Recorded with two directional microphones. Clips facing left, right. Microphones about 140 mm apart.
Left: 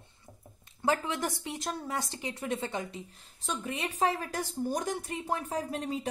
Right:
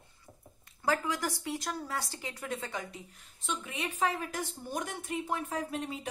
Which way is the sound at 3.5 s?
35° left (ahead or behind).